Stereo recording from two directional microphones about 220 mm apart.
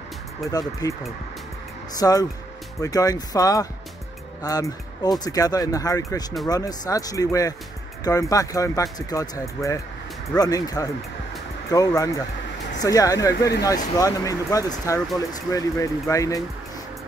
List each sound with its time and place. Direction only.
0.5 s speech: 15° left (ahead or behind)
2.0 s speech: 15° left (ahead or behind)